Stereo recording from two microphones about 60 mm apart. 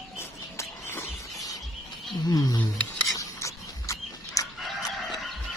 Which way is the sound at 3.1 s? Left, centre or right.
Left.